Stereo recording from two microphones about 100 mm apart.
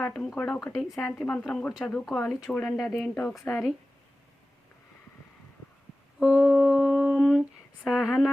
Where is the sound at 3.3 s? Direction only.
30° left (ahead or behind).